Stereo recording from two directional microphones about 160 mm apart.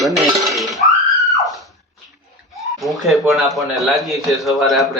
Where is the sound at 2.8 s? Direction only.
Centre (ahead or behind).